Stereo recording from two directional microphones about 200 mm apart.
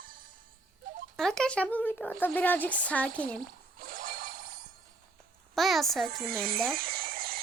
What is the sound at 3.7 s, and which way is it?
Telephone bell ringing, 45° right (ahead or behind).